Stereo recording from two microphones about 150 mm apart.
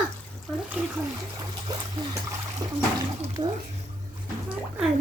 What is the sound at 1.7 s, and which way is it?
Trickle, 25° right (ahead or behind).